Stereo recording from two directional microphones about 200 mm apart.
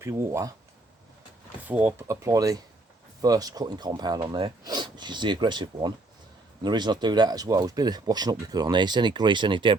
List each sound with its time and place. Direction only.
0.0 s speech: 10° right (ahead or behind)
1.6 s speech: 10° right (ahead or behind)